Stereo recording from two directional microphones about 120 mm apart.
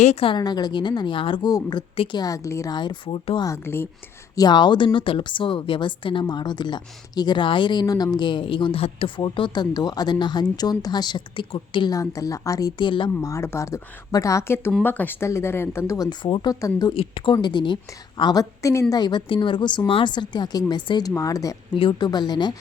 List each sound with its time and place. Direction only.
0.0 s a woman's voice: 65° left (ahead or behind)
0.3 s a woman's voice: 35° left (ahead or behind)
2.7 s a woman's voice: 40° left (ahead or behind)
3.4 s speech: 20° left (ahead or behind)
4.4 s a woman's voice: 35° left (ahead or behind)
11.9 s a woman's voice: 30° left (ahead or behind)
13.2 s speech: 25° left (ahead or behind)
16.0 s a woman's voice: 40° left (ahead or behind)
16.9 s a woman's voice: 50° left (ahead or behind)
21.2 s speech: 30° left (ahead or behind)
21.8 s a woman's voice: 40° left (ahead or behind)